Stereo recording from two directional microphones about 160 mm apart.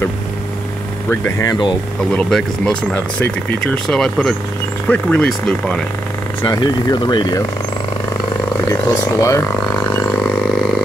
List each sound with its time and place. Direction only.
1.2 s speech: 20° left (ahead or behind)
2.1 s speech: 5° left (ahead or behind)
6.4 s speech: 25° left (ahead or behind)
8.6 s speech: 20° left (ahead or behind)